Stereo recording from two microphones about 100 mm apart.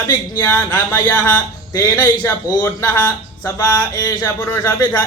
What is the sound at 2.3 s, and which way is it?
Speech, 20° left (ahead or behind).